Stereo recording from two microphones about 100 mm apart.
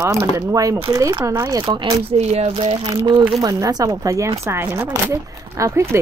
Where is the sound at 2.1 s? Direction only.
90° right.